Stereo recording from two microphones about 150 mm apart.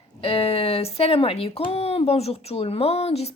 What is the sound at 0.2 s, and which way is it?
Speech, 40° left (ahead or behind).